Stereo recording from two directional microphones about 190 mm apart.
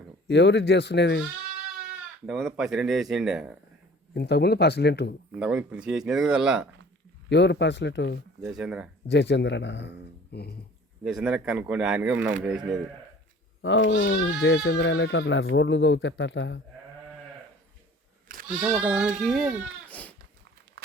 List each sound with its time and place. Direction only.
0.3 s a man's voice: 65° left (ahead or behind)
2.2 s speech: centre (ahead or behind)
4.1 s a man's voice: 60° left (ahead or behind)
5.4 s speech: 5° right (ahead or behind)
7.3 s speech: 65° left (ahead or behind)
8.4 s speech: 5° right (ahead or behind)
9.0 s speech: 65° left (ahead or behind)
10.3 s a man's voice: 55° left (ahead or behind)
11.0 s speech: centre (ahead or behind)
13.6 s speech: 85° left
18.4 s speech: 5° right (ahead or behind)